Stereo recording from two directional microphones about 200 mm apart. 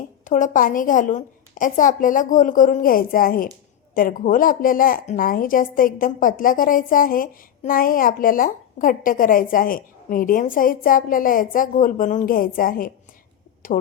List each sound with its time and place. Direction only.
0.3 s a woman's voice: 40° left (ahead or behind)